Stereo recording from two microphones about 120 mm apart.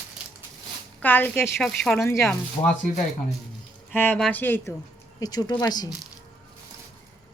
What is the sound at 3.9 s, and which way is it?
Speech, 15° left (ahead or behind).